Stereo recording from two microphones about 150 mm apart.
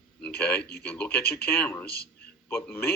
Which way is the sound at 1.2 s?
90° left.